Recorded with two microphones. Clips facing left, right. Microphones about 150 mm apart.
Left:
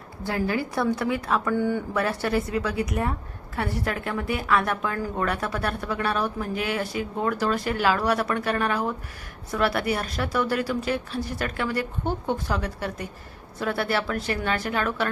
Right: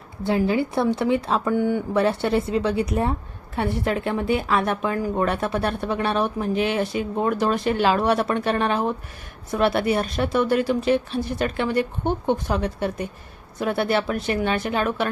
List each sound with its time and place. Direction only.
0.2 s speech: 20° right (ahead or behind)